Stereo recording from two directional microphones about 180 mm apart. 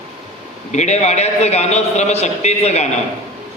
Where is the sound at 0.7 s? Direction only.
40° left (ahead or behind).